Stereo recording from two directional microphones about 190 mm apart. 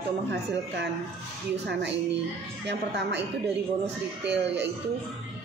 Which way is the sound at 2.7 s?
65° right (ahead or behind).